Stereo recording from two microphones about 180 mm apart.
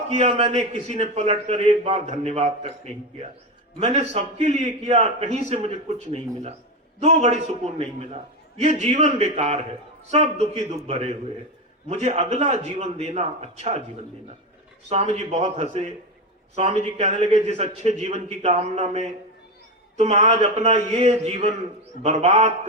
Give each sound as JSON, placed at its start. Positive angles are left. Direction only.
{"t": 0.1, "sound": "a man's voice", "side_deg": -35}
{"t": 14.8, "sound": "a man's voice", "side_deg": -40}
{"t": 17.0, "sound": "a man's voice", "side_deg": -40}